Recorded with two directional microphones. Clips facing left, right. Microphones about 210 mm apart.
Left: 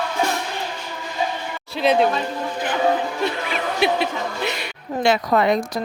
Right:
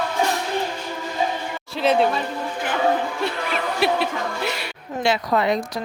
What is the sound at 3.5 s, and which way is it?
Music, centre (ahead or behind).